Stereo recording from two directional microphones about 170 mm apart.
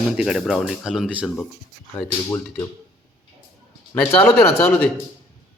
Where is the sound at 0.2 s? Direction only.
5° right (ahead or behind).